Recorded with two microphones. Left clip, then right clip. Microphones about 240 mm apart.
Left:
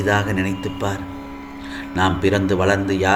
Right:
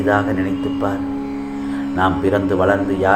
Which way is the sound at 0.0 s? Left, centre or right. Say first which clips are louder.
Right 3 dB; left.